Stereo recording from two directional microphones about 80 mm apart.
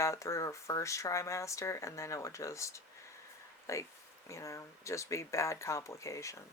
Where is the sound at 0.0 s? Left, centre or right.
Left.